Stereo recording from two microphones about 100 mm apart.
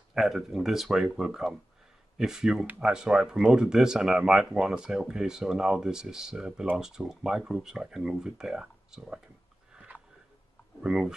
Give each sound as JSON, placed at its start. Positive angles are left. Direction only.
{"t": 0.1, "sound": "speech", "side_deg": -5}
{"t": 9.9, "sound": "a sound", "side_deg": 15}
{"t": 10.8, "sound": "speech", "side_deg": -5}